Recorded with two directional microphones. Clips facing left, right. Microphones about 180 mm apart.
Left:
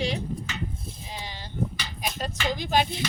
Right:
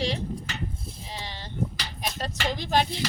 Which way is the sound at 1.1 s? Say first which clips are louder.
Right 1 dB; 5° left (ahead or behind).